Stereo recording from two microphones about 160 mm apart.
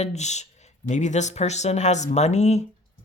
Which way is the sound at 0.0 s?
45° left (ahead or behind).